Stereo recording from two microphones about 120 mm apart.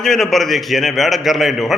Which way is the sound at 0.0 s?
5° left (ahead or behind).